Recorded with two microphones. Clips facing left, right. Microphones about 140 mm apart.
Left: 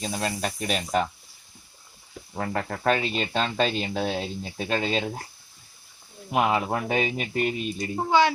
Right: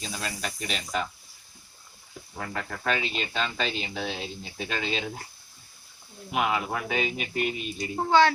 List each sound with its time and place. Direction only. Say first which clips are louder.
0.0 s speech: left 6 dB; 50° left (ahead or behind)
2.4 s speech: left 6 dB; 40° left (ahead or behind)
6.3 s speech: left 4 dB; 40° left (ahead or behind)
7.9 s speech: right 1 dB; 10° left (ahead or behind)